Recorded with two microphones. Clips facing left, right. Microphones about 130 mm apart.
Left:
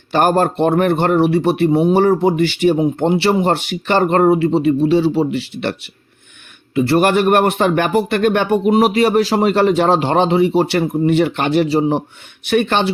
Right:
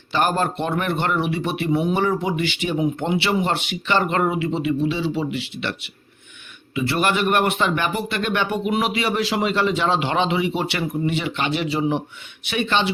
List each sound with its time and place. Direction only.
0.1 s speech: 45° left (ahead or behind)